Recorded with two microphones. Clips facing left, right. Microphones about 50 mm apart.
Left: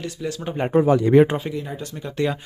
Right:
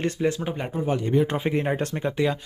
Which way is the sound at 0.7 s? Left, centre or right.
Left.